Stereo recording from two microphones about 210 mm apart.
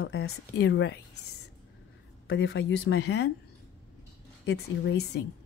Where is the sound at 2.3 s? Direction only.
55° left (ahead or behind).